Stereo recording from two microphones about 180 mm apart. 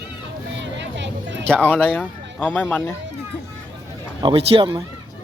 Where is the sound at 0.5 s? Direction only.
80° right.